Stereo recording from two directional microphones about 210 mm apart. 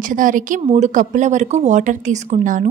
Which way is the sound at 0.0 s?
40° right (ahead or behind).